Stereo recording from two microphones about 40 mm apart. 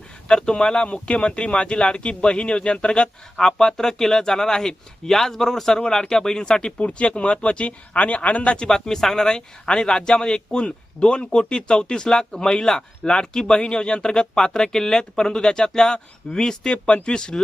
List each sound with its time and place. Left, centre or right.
0.3 s speech: left
8.5 s speech: centre